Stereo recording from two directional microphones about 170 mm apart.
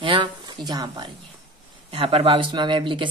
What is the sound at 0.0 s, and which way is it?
Speech, 30° right (ahead or behind).